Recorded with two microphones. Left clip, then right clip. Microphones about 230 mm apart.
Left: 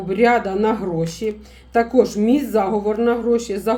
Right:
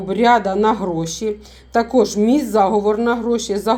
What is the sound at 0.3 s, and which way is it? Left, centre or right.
A woman's voice, centre.